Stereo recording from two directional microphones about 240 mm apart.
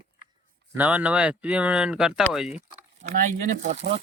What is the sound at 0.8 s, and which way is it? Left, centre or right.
Speech, centre.